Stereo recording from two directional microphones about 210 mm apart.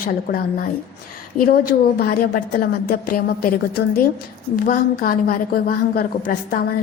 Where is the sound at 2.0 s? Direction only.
45° left (ahead or behind).